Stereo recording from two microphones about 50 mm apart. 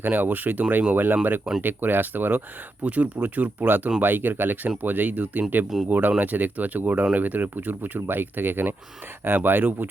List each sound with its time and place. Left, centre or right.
0.0 s speech: right
2.8 s speech: right
5.6 s speech: centre
5.9 s speech: right